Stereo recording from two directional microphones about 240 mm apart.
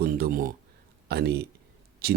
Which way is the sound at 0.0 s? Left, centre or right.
Right.